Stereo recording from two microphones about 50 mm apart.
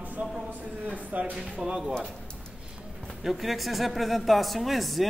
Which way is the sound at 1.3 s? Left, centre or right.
Centre.